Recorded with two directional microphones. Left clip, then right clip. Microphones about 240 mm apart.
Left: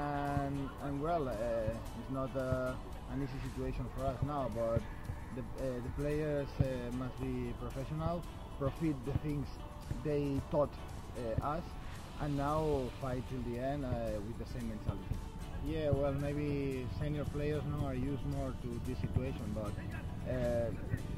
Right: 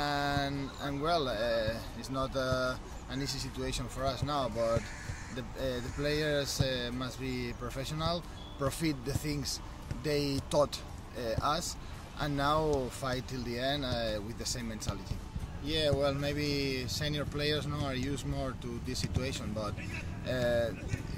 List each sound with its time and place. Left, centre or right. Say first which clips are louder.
0.0 s a sound: right 5 dB; centre
1.0 s speech: right 5 dB; centre
15.7 s speech: right 5 dB; centre